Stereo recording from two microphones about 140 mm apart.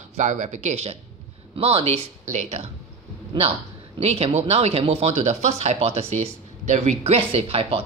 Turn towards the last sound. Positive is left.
turn(degrees=-40)  # may be behind; listen again after turning